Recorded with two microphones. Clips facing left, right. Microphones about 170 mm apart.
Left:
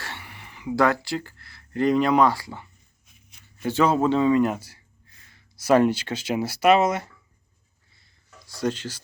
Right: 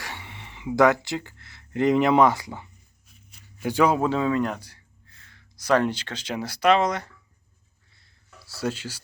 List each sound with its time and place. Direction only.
0.0 s a man's voice: 20° right (ahead or behind)
4.2 s speech: centre (ahead or behind)
8.4 s speech: 5° right (ahead or behind)